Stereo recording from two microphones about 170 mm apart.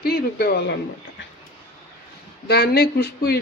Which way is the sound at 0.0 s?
65° left (ahead or behind).